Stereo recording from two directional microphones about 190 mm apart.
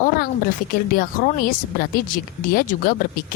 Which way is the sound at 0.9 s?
50° left (ahead or behind).